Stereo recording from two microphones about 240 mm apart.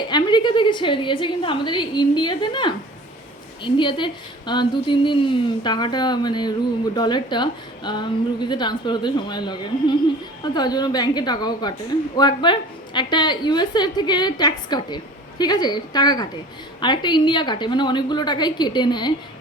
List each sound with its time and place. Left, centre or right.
0.1 s a woman's voice: centre